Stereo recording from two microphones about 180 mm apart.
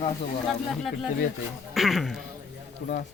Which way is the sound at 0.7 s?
Centre (ahead or behind).